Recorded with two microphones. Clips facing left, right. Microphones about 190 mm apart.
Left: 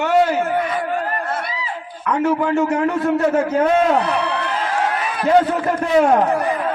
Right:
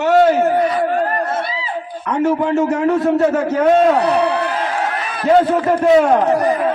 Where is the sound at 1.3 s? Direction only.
25° right (ahead or behind).